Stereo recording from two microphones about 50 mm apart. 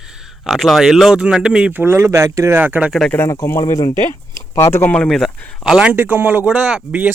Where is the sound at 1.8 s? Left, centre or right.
Right.